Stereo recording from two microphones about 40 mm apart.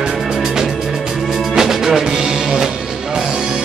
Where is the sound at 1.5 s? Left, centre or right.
Centre.